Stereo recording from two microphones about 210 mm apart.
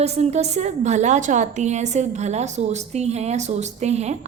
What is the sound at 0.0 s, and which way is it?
A woman's voice, 30° right (ahead or behind).